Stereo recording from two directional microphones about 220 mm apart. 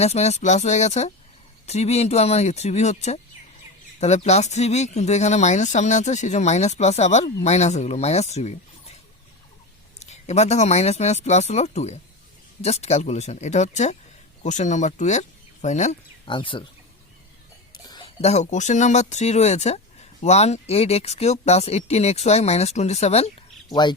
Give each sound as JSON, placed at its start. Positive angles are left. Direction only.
{"t": 0.0, "sound": "speech", "side_deg": 30}
{"t": 10.0, "sound": "speech", "side_deg": 30}
{"t": 17.7, "sound": "speech", "side_deg": 20}